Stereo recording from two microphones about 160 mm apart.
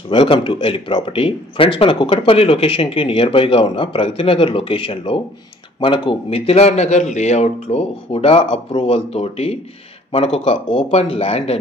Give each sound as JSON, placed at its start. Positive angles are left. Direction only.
{"t": 0.1, "sound": "speech", "side_deg": 35}